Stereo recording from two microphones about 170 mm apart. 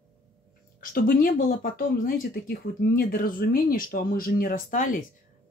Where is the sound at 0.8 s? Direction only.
55° left (ahead or behind).